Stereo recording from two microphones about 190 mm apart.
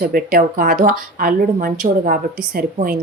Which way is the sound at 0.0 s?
50° right (ahead or behind).